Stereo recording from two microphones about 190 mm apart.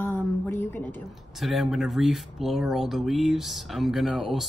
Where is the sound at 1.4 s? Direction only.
Centre (ahead or behind).